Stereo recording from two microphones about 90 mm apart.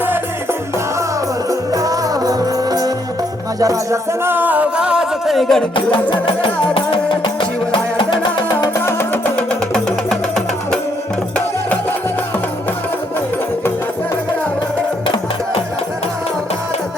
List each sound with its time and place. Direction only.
1.5 s music: 40° right (ahead or behind)
4.2 s music: 25° right (ahead or behind); by 5.6 s centre (ahead or behind)
5.7 s music: 70° left (ahead or behind)
8.8 s music: 25° left (ahead or behind)
9.7 s music: 5° left (ahead or behind)